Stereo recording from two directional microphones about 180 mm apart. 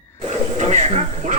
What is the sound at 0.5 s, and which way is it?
Speech, 40° right (ahead or behind).